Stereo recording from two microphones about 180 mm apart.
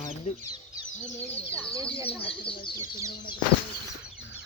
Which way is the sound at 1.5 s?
5° left (ahead or behind).